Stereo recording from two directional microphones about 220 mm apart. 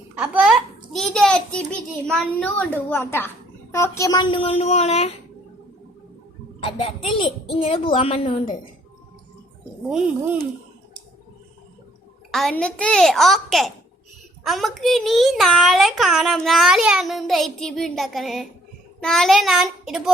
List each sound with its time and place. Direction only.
0.2 s a sound: 5° right (ahead or behind)
2.1 s a woman's voice: 5° left (ahead or behind); by 5.1 s 30° left (ahead or behind)
6.6 s a woman's voice: 25° left (ahead or behind)
9.9 s a child's voice: 5° right (ahead or behind)
12.3 s a child's voice: centre (ahead or behind)